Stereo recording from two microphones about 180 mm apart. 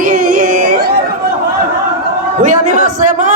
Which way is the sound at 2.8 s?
45° right (ahead or behind).